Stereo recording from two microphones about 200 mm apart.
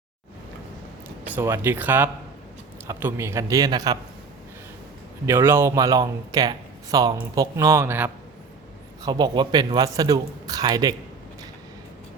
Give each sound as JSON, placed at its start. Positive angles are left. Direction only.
{"t": 1.3, "sound": "speech", "side_deg": -15}
{"t": 5.2, "sound": "speech", "side_deg": -10}
{"t": 9.0, "sound": "speech", "side_deg": -20}